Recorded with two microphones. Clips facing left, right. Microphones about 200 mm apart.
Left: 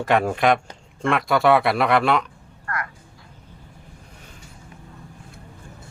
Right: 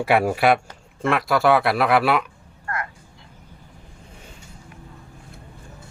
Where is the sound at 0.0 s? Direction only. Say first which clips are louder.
Right 1 dB; 10° right (ahead or behind).